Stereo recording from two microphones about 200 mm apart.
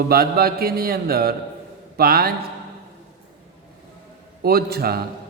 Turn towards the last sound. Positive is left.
turn(degrees=-50)  # may be behind; listen again after turning